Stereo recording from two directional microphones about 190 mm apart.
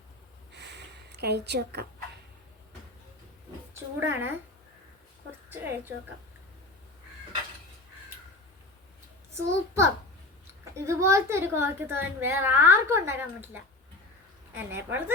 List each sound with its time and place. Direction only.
0.5 s a sound: 65° right (ahead or behind)
4.0 s a woman's voice: 10° right (ahead or behind)
5.5 s a woman's voice: 10° right (ahead or behind)
9.3 s a child's voice: 15° right (ahead or behind)